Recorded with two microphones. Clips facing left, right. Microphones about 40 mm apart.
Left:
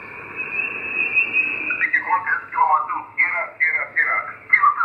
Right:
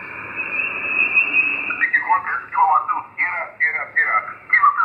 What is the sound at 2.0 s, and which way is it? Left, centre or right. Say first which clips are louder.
Radio: right 1 dB; centre.